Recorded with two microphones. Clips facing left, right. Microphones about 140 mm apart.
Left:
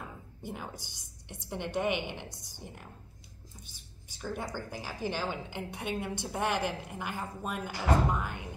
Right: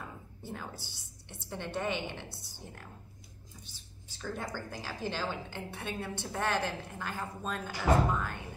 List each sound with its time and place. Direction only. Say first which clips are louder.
0.4 s a woman's voice: left 2 dB; 15° left (ahead or behind)